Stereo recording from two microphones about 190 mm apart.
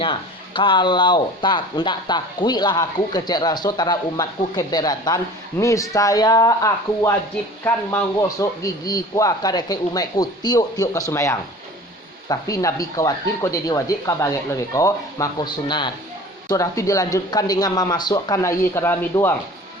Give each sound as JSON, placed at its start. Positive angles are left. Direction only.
{"t": 0.0, "sound": "speech", "side_deg": 25}